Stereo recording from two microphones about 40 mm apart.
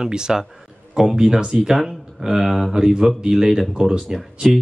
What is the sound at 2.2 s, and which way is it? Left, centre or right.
Speech, centre.